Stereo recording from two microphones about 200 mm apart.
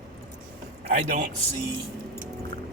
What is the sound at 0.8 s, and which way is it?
Speech, 35° right (ahead or behind).